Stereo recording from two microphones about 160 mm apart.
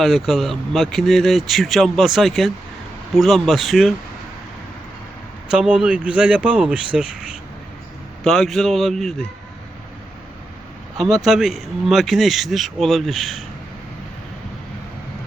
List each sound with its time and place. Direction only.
0.0 s speech: centre (ahead or behind)
5.5 s speech: 5° right (ahead or behind)
8.2 s speech: centre (ahead or behind)
10.9 s speech: centre (ahead or behind)